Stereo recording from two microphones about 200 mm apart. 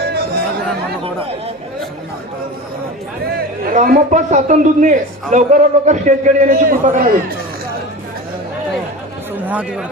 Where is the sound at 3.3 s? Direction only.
45° right (ahead or behind).